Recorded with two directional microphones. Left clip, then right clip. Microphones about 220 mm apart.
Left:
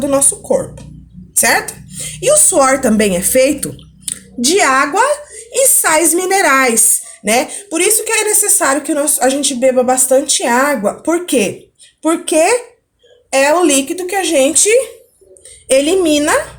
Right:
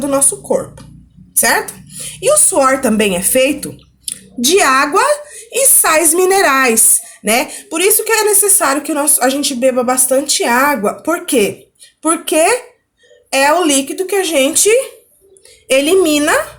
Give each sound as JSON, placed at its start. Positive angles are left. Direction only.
{"t": 0.0, "sound": "speech", "side_deg": -10}
{"t": 4.4, "sound": "speech", "side_deg": -10}
{"t": 12.0, "sound": "speech", "side_deg": 0}
{"t": 13.3, "sound": "speech", "side_deg": -10}